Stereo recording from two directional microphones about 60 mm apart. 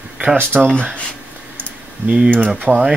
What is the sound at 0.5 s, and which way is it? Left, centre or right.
Speech, centre.